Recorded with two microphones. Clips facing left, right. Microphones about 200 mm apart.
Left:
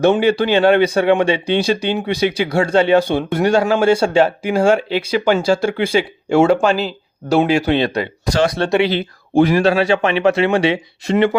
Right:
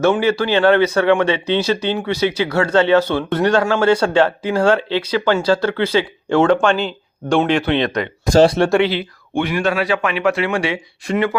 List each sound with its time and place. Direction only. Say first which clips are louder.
0.0 s speech: left 2 dB; 15° left (ahead or behind)
7.6 s speech: left 2 dB; 35° left (ahead or behind)
8.2 s speech: right 6 dB; 45° right (ahead or behind)
9.0 s speech: left 7 dB; 40° left (ahead or behind)